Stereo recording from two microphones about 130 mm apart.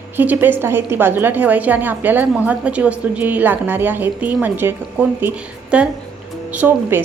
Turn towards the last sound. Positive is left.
turn(degrees=-15)  # may be behind; listen again after turning